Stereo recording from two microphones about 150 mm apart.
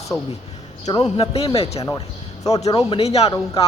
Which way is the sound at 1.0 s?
40° left (ahead or behind).